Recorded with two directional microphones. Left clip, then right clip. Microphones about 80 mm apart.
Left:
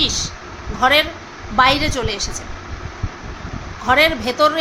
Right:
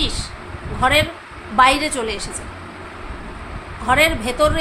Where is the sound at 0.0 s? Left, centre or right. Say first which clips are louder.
Left 5 dB; left.